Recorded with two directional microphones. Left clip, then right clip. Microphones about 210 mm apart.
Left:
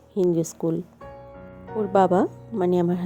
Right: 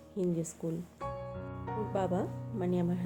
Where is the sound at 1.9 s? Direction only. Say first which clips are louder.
Left 16 dB; 35° left (ahead or behind).